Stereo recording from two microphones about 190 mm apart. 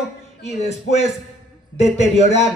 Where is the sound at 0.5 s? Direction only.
35° left (ahead or behind).